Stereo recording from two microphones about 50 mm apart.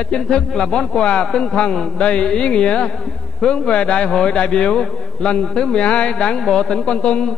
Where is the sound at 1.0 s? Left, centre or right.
Centre.